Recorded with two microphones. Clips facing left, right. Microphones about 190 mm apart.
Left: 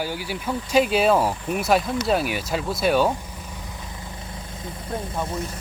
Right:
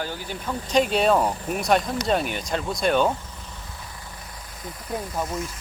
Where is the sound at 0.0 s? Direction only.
10° left (ahead or behind).